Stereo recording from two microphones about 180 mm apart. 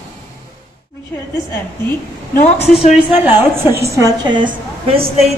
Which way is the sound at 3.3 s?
10° right (ahead or behind).